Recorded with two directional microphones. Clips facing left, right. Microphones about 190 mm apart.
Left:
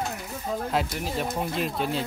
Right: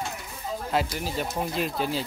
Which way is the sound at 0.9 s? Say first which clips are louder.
Left 1 dB; centre (ahead or behind).